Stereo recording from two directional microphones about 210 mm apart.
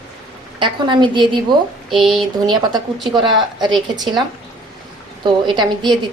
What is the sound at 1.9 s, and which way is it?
A woman's voice, centre (ahead or behind).